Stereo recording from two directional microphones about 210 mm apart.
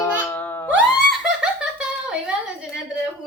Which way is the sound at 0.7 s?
5° right (ahead or behind).